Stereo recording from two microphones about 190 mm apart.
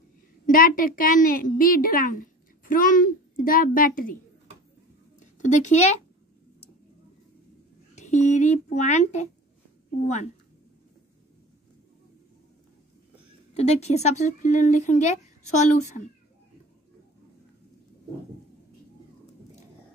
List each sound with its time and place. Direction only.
0.5 s a woman's voice: 50° left (ahead or behind)
5.4 s speech: 40° left (ahead or behind)
7.9 s speech: 40° left (ahead or behind)
13.6 s speech: 35° left (ahead or behind)